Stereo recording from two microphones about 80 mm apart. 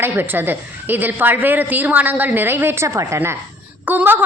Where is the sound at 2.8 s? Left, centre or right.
Right.